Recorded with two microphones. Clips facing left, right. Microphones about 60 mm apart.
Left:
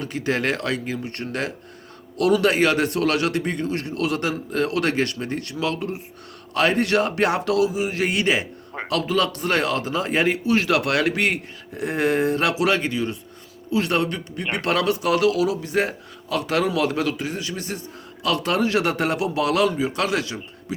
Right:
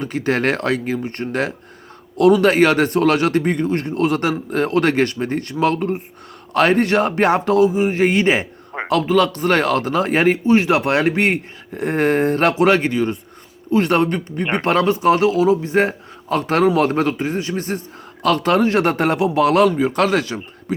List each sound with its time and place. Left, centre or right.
0.0 s speech: right